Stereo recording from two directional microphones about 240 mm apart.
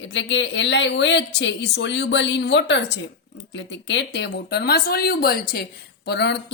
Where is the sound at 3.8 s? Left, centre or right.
Left.